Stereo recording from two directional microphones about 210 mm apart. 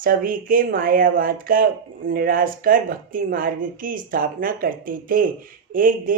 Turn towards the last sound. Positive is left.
turn(degrees=-40)  # may be behind; listen again after turning